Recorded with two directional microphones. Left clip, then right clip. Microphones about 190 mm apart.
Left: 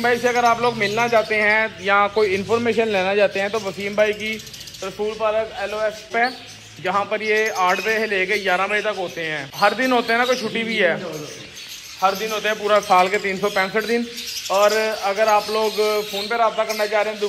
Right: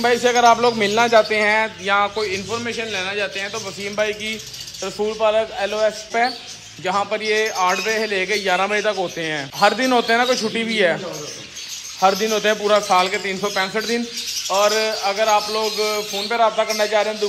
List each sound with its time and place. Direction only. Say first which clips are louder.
0.0 s a man's voice: right 3 dB; 25° right (ahead or behind); by 3.7 s 5° right (ahead or behind)
3.8 s a man's voice: left 2 dB; 15° right (ahead or behind)
4.8 s a man's voice: right 3 dB; 30° right (ahead or behind)
6.8 s speech: even; 20° right (ahead or behind)
12.0 s speech: right 3 dB; 45° right (ahead or behind)
12.8 s a man's voice: left 1 dB; 15° right (ahead or behind)